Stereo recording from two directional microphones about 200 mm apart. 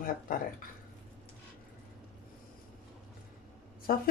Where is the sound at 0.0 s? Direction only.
45° left (ahead or behind).